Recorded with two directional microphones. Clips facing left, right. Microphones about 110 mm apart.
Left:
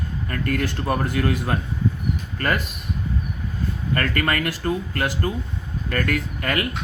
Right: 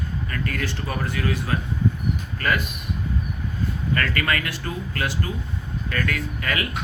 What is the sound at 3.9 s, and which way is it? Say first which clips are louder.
Speech: left 2 dB; 40° left (ahead or behind).